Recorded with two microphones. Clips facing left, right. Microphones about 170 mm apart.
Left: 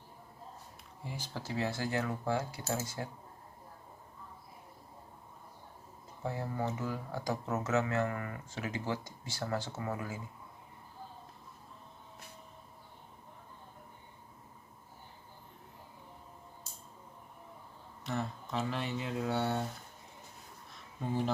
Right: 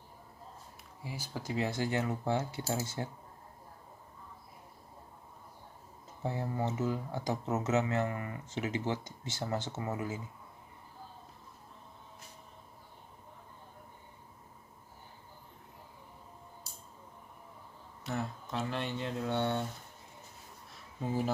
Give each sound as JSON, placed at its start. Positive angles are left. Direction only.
{"t": 1.0, "sound": "speech", "side_deg": -10}
{"t": 6.2, "sound": "speech", "side_deg": -20}
{"t": 18.0, "sound": "speech", "side_deg": 0}